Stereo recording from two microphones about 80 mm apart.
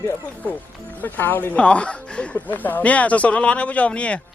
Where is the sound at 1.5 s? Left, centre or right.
Centre.